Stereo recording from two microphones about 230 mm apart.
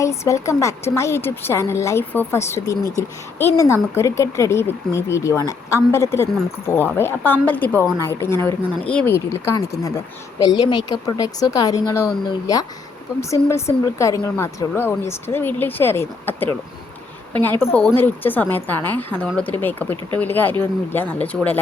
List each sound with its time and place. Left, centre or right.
0.0 s speech: centre
17.6 s speech: centre